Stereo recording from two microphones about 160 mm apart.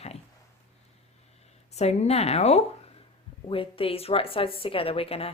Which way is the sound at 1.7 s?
45° left (ahead or behind).